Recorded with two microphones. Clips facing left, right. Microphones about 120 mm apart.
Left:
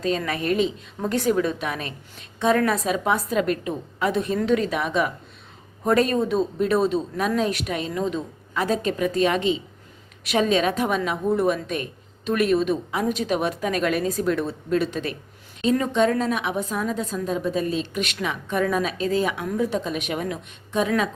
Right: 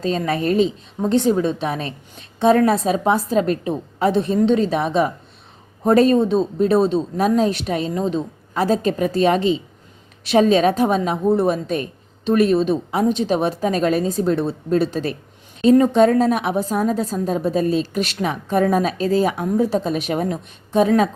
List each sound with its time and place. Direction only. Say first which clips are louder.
0.0 s a woman's voice: right 4 dB; 30° right (ahead or behind)